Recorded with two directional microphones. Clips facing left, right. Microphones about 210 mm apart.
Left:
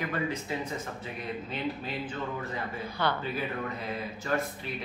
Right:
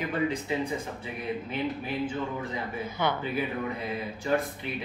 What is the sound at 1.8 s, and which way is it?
Speech, 10° right (ahead or behind).